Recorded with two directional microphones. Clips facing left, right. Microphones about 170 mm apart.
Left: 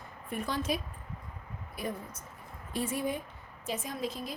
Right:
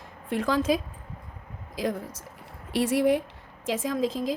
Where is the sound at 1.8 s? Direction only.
90° right.